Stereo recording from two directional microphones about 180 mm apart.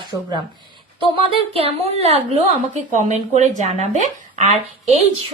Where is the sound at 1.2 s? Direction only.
30° right (ahead or behind).